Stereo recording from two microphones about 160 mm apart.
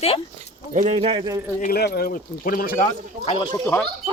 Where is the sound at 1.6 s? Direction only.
80° left; by 2.7 s 65° left (ahead or behind).